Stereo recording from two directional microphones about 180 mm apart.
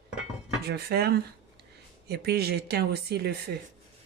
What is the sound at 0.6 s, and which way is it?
Speech, 60° right (ahead or behind).